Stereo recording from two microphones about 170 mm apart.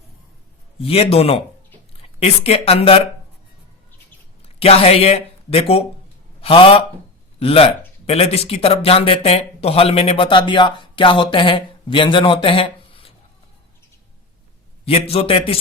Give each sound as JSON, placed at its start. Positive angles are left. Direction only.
{"t": 0.8, "sound": "speech", "side_deg": 35}
{"t": 4.4, "sound": "speech", "side_deg": 35}
{"t": 14.8, "sound": "speech", "side_deg": 35}